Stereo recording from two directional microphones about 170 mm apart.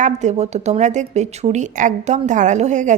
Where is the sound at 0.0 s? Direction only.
45° right (ahead or behind).